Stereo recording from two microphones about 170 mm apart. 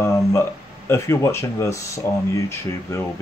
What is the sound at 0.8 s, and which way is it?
Speech, 15° left (ahead or behind).